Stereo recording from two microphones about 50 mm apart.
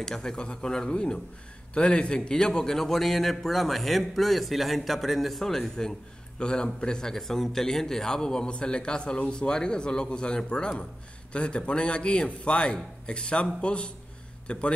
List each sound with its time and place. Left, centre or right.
0.0 s a man's voice: centre